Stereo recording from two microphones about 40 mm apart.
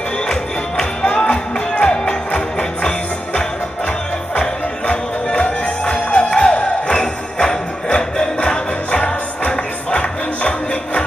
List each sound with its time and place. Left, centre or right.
0.3 s music: centre
4.4 s music: left